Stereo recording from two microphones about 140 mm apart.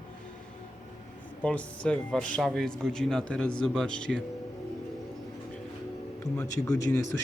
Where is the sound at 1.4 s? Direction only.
10° left (ahead or behind).